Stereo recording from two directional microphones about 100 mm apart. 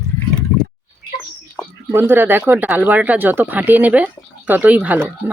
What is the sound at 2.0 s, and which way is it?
Speech, 20° right (ahead or behind).